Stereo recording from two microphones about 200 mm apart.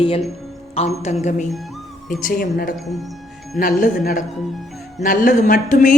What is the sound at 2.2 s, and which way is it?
A woman's voice, 50° left (ahead or behind).